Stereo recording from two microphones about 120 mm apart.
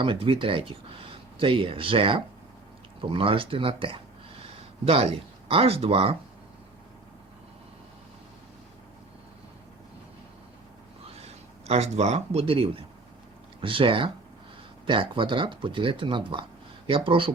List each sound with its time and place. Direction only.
0.0 s speech: 45° right (ahead or behind)
11.0 s speech: 60° right (ahead or behind)